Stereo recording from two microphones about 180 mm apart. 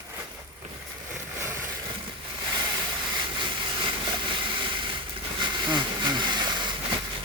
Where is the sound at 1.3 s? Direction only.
15° right (ahead or behind).